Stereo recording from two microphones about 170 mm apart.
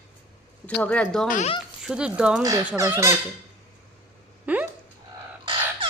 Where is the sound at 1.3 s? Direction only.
45° left (ahead or behind).